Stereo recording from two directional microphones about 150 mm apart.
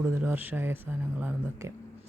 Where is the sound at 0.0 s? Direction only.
10° right (ahead or behind).